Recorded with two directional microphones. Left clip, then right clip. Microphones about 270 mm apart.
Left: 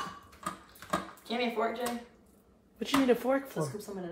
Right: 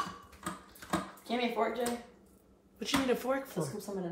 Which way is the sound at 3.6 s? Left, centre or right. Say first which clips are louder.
Left 2 dB; centre.